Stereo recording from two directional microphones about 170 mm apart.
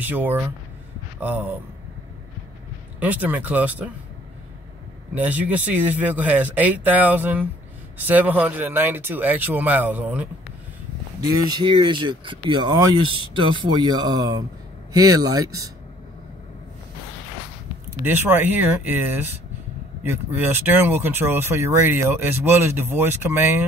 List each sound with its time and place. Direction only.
0.0 s speech: 10° right (ahead or behind)
3.0 s speech: 10° right (ahead or behind)
5.1 s speech: 10° right (ahead or behind)
11.4 s speech: 25° right (ahead or behind)
18.0 s speech: 10° right (ahead or behind)